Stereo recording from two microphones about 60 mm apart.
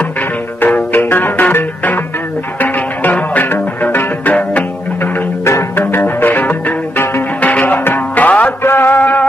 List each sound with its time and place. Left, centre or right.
0.9 s music: left
5.4 s music: left
6.0 s music: left
8.6 s a sound: left